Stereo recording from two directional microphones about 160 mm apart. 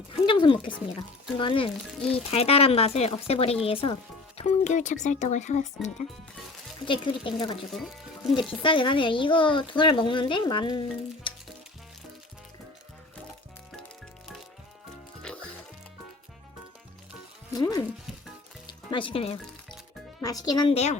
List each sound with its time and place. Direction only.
0.1 s a sound: 30° left (ahead or behind)
0.9 s speech: 35° left (ahead or behind)
4.4 s speech: 45° left (ahead or behind)
6.8 s speech: 30° left (ahead or behind)
7.7 s speech: centre (ahead or behind)
8.4 s speech: 30° left (ahead or behind)
15.2 s music: 5° left (ahead or behind)
17.5 s music: 25° left (ahead or behind)
20.2 s a child's voice: 25° left (ahead or behind)